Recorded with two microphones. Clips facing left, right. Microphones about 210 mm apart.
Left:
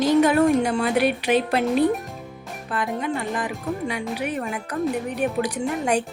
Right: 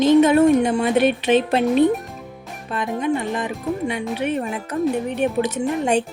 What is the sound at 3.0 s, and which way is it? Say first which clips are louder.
A woman's voice: right 4 dB; 20° right (ahead or behind).